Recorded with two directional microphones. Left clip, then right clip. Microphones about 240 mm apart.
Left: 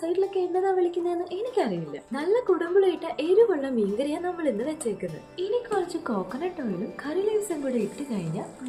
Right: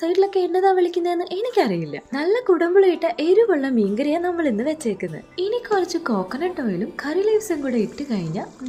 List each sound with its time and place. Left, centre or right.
0.0 s a woman's voice: right